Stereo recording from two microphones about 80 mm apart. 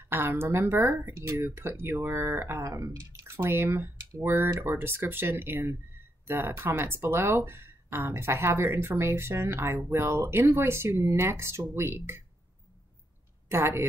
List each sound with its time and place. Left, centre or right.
0.0 s speech: right
2.6 s speech: right
13.5 s speech: right